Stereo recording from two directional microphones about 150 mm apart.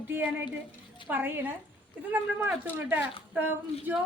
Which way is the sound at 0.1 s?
15° right (ahead or behind).